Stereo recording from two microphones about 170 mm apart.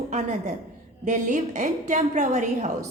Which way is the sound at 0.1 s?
45° right (ahead or behind).